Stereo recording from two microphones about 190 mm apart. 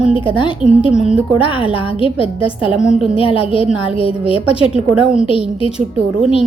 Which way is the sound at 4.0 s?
30° left (ahead or behind).